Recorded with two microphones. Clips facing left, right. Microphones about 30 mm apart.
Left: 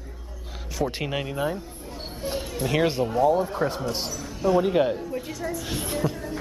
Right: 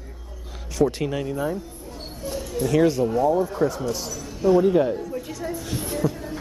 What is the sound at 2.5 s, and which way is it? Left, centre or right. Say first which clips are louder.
A man's voice: right 4 dB; left.